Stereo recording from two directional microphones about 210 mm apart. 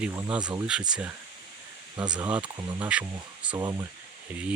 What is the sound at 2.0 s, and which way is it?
Speech, 20° right (ahead or behind).